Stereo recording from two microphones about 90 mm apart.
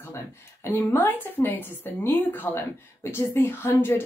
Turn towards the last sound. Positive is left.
turn(degrees=25)  # may be behind; listen again after turning